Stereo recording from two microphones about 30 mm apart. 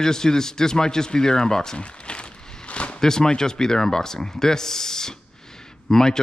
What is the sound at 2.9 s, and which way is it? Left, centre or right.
Speech, left.